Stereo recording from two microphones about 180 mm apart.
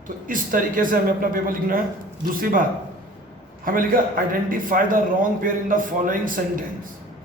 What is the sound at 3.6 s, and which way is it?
A man's voice, 50° right (ahead or behind).